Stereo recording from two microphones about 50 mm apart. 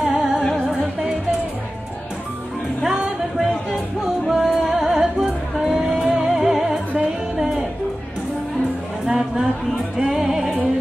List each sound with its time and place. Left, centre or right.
0.0 s music: centre
2.8 s music: centre
9.0 s a sound: centre
9.9 s music: centre